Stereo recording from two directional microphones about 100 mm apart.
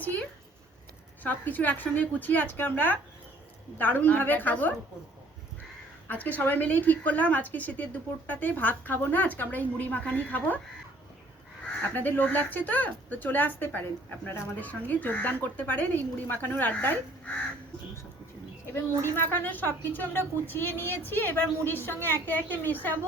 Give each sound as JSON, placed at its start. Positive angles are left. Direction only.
{"t": 0.0, "sound": "a woman's voice", "side_deg": 15}
{"t": 6.1, "sound": "a woman's voice", "side_deg": 15}
{"t": 11.8, "sound": "speech", "side_deg": 20}
{"t": 18.6, "sound": "speech", "side_deg": 25}